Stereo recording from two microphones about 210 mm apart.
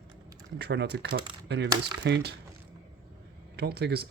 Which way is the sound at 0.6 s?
55° right (ahead or behind).